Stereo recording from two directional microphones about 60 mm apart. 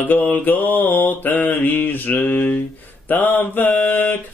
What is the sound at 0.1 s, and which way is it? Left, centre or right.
Mantra, left.